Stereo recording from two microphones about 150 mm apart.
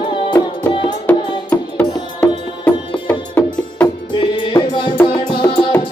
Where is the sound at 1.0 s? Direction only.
10° left (ahead or behind).